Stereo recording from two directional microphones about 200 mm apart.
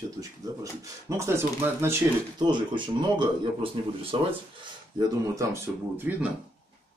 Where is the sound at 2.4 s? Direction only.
25° right (ahead or behind).